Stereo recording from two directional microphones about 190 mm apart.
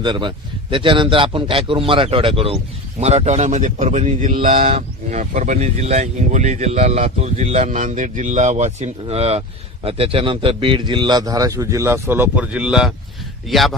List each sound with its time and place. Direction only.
0.0 s a man's voice: 25° right (ahead or behind); by 13.7 s centre (ahead or behind)